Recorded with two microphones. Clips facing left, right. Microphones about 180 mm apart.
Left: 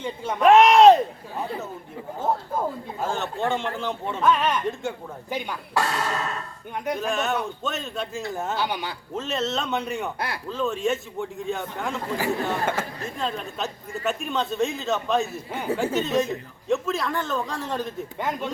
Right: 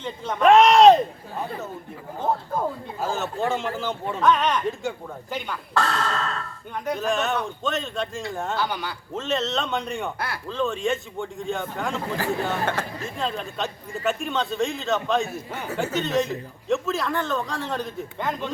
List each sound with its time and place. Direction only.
0.0 s a man's voice: 10° left (ahead or behind)
3.0 s a man's voice: centre (ahead or behind)
5.3 s a man's voice: 10° left (ahead or behind)
8.5 s speech: 15° left (ahead or behind)
9.1 s a man's voice: centre (ahead or behind)